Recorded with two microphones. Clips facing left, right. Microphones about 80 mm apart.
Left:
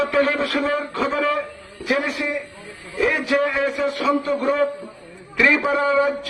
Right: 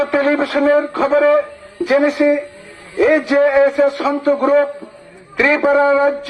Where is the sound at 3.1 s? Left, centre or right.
Right.